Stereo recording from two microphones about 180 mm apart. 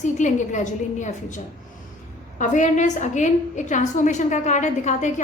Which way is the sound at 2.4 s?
45° left (ahead or behind).